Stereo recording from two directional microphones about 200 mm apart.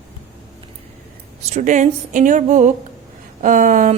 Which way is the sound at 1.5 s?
40° right (ahead or behind).